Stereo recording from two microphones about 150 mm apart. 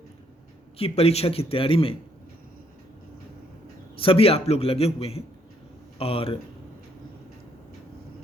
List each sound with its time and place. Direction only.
0.8 s a man's voice: 40° left (ahead or behind)
3.9 s a man's voice: 40° left (ahead or behind)